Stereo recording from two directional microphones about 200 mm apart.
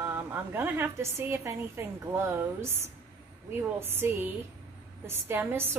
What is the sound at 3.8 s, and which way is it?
A woman's voice, 10° right (ahead or behind).